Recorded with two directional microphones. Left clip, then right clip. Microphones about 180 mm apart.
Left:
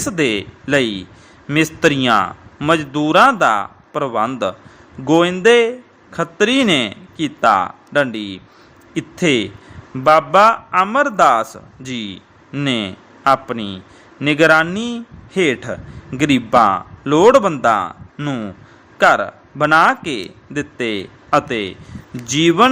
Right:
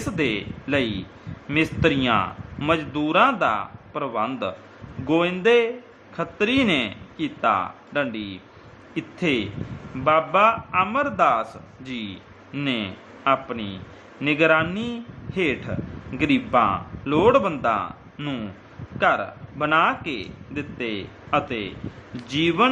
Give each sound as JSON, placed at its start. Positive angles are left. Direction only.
{"t": 0.0, "sound": "a man's voice", "side_deg": 35}